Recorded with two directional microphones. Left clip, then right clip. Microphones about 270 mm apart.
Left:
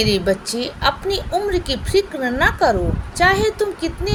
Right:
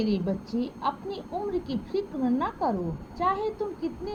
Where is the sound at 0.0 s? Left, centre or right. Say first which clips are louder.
Left 12 dB; right.